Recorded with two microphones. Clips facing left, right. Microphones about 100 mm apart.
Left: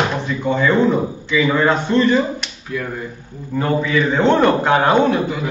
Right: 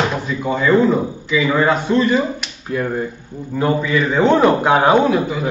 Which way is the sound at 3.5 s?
5° right (ahead or behind).